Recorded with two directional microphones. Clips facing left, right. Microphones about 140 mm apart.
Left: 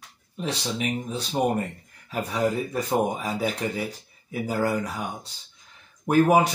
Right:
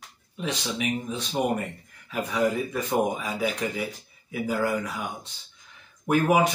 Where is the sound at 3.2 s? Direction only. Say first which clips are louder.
Left 1 dB; 35° left (ahead or behind).